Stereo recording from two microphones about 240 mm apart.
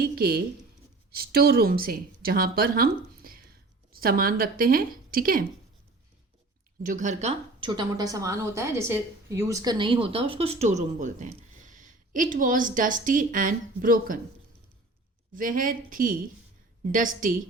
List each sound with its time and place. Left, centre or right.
0.0 s zipper: right
1.1 s a woman's voice: right
6.8 s speech: right
15.4 s a woman's voice: right